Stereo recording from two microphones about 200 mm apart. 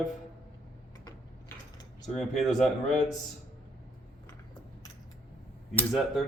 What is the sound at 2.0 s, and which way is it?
Speech, centre (ahead or behind).